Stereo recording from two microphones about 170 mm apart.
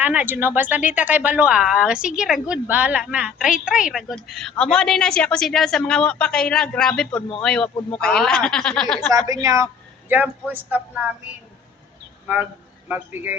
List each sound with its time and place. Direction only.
0.0 s speech: 10° right (ahead or behind)
7.2 s a man's voice: 30° left (ahead or behind)
7.4 s speech: 5° left (ahead or behind)
9.0 s a woman's voice: 20° right (ahead or behind)
12.9 s speech: 10° right (ahead or behind)